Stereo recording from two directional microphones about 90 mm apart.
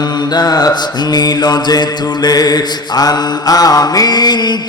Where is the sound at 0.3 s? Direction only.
45° left (ahead or behind).